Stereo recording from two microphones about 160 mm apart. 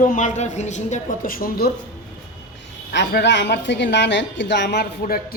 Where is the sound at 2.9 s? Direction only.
90° left.